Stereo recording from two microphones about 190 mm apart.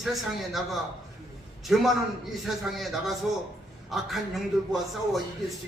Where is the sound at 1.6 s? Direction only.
Centre (ahead or behind).